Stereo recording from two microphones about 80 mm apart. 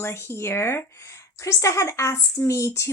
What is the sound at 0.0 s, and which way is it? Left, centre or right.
Speech, left.